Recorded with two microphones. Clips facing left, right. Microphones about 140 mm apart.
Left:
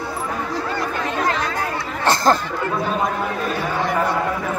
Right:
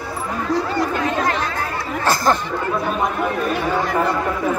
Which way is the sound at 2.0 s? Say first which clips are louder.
Left 1 dB; 20° left (ahead or behind).